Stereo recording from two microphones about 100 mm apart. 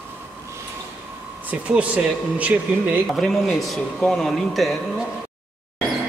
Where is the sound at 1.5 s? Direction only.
15° right (ahead or behind).